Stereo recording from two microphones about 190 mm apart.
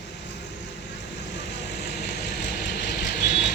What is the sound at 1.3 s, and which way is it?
Vehicle, 65° left (ahead or behind).